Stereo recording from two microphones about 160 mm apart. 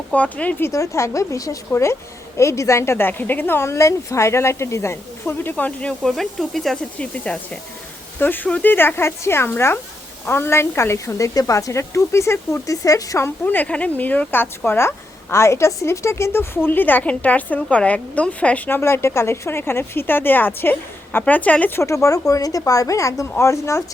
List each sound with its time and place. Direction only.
0.1 s speech: 10° left (ahead or behind)